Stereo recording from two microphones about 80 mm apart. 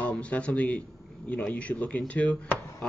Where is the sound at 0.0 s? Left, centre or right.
Centre.